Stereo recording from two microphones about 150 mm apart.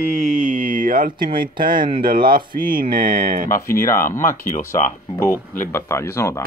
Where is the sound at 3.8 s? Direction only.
20° left (ahead or behind).